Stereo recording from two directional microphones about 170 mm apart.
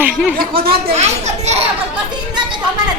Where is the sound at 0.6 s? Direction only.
65° right (ahead or behind).